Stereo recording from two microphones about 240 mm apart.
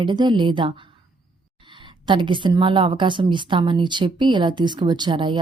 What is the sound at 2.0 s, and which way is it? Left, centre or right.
Speech, centre.